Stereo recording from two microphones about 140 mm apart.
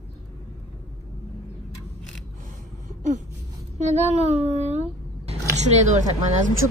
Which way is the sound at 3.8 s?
55° right (ahead or behind).